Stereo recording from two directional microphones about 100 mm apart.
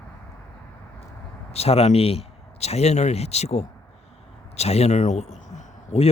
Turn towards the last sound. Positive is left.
turn(degrees=90)